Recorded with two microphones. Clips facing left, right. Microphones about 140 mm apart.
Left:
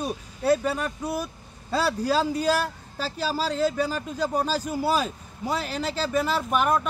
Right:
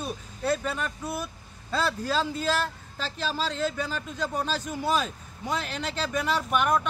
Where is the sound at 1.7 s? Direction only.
10° left (ahead or behind).